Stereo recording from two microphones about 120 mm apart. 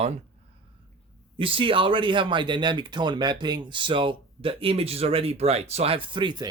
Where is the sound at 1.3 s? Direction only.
45° right (ahead or behind).